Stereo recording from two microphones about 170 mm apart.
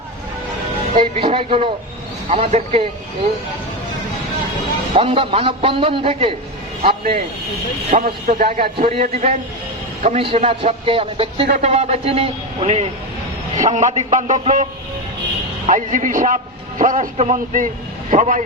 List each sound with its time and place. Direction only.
0.9 s a man's voice: 35° right (ahead or behind)
4.9 s a man's voice: 35° right (ahead or behind)
7.9 s a man's voice: 50° right (ahead or behind)
8.6 s a man's voice: 40° right (ahead or behind)